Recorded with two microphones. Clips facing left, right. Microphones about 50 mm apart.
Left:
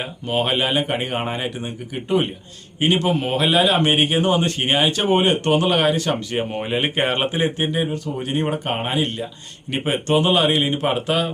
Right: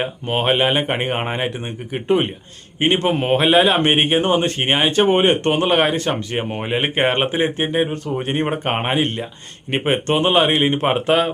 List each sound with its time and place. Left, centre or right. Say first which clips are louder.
0.0 s speech: right 2 dB; right
6.3 s speech: right 1 dB; centre